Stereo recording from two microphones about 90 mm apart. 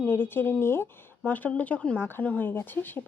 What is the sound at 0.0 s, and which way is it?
A woman's voice, 25° left (ahead or behind).